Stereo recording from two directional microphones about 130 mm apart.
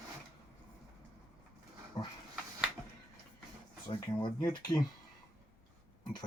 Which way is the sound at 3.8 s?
35° left (ahead or behind).